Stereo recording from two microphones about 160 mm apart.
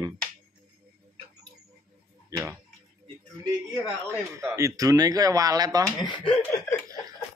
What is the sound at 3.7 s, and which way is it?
Speech, 20° right (ahead or behind).